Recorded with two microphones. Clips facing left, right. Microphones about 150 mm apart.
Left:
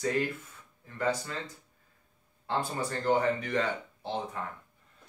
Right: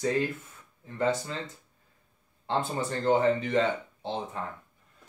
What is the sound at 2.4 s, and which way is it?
Speech, 25° right (ahead or behind).